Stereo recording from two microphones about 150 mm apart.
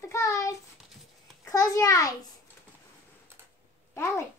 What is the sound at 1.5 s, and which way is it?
Speech, 20° left (ahead or behind).